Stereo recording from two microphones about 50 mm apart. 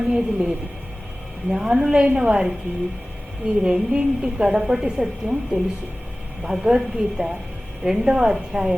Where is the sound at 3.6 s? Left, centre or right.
Centre.